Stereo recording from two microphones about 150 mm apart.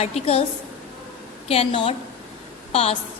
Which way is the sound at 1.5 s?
40° left (ahead or behind).